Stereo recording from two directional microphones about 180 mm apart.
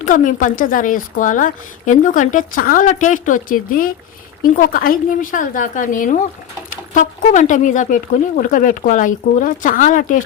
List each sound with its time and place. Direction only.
0.0 s speech: 45° left (ahead or behind)